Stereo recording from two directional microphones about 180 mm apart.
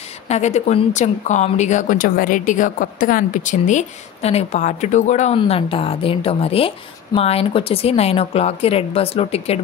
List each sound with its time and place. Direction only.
0.3 s speech: 40° left (ahead or behind)